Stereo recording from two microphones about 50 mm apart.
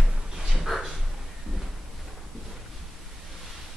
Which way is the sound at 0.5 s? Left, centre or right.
Centre.